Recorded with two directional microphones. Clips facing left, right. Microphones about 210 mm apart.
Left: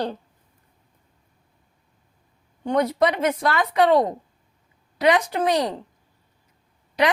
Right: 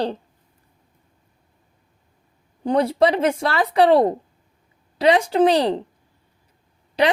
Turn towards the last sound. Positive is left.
turn(degrees=-30)  # may be behind; listen again after turning